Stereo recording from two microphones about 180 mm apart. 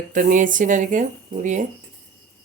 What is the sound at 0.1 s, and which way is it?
Speech, 45° right (ahead or behind).